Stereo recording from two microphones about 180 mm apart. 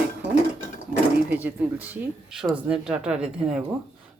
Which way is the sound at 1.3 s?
10° right (ahead or behind).